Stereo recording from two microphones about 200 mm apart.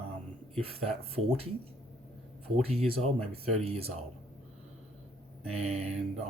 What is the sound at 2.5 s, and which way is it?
Speech, 30° right (ahead or behind).